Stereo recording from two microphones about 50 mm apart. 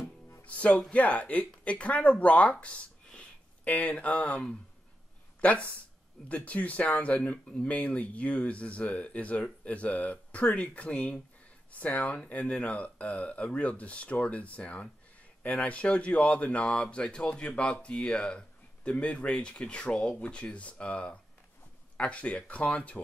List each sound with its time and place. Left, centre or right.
0.5 s speech: left
3.6 s speech: left
5.4 s speech: left